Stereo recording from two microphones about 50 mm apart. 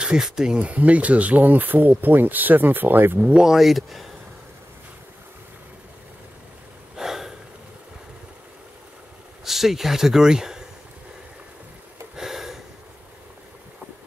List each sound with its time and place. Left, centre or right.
0.0 s speech: centre
0.6 s speech: right
3.3 s speech: centre
7.0 s snort: centre
9.4 s speech: centre
12.2 s a sound: centre